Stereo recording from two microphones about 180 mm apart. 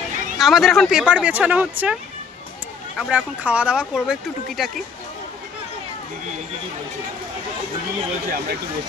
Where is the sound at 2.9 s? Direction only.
5° right (ahead or behind).